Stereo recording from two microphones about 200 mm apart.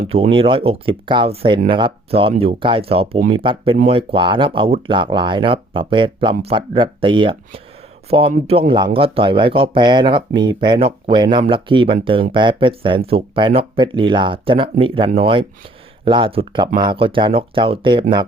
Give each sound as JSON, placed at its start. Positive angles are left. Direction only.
{"t": 0.0, "sound": "speech", "side_deg": -30}